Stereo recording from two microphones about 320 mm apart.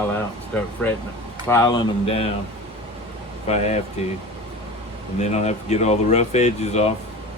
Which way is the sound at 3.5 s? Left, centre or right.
Centre.